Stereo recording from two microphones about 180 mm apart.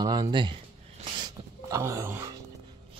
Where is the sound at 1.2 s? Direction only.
15° right (ahead or behind).